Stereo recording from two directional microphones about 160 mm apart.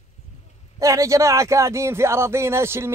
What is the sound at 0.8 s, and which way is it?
Speech, 20° right (ahead or behind).